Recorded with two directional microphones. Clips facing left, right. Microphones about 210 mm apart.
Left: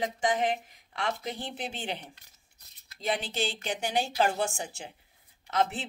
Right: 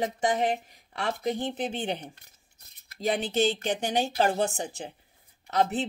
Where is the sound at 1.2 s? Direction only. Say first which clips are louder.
Right 7 dB; 45° right (ahead or behind).